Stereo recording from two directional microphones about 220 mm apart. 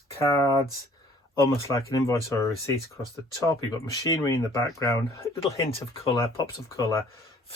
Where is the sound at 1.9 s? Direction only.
15° left (ahead or behind).